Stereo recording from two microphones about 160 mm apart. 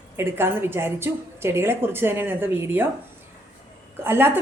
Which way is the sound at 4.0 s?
15° right (ahead or behind).